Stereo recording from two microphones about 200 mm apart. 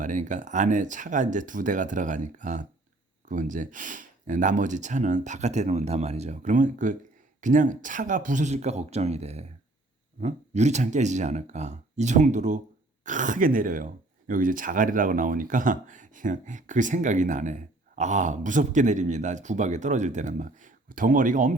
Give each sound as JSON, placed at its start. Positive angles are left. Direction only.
{"t": 0.0, "sound": "speech", "side_deg": -40}